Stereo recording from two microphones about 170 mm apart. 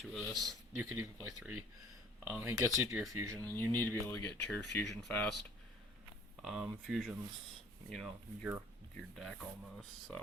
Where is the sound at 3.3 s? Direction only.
10° left (ahead or behind).